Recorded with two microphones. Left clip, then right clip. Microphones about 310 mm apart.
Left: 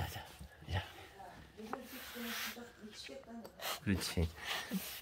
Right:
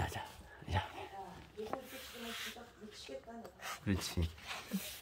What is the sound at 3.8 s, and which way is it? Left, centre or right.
Speech, centre.